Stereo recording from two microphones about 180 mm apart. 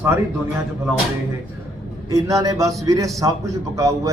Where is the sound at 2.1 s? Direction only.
20° right (ahead or behind).